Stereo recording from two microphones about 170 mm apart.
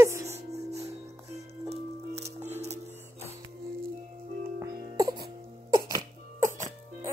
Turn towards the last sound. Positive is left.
turn(degrees=-20)  # may be behind; listen again after turning